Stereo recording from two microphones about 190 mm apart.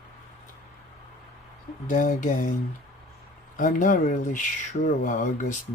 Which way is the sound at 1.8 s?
45° left (ahead or behind).